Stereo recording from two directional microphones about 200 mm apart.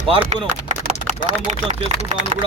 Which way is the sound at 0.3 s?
35° right (ahead or behind).